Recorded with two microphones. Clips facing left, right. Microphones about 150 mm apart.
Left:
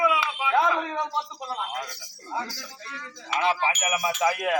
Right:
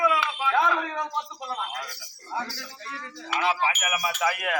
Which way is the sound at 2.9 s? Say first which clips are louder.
Right 3 dB; 35° right (ahead or behind).